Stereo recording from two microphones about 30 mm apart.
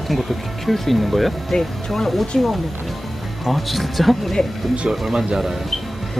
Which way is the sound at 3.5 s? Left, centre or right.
Centre.